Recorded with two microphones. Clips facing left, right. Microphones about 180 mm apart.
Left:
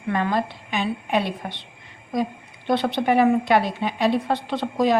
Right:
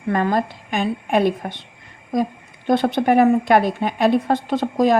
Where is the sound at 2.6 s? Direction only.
45° right (ahead or behind).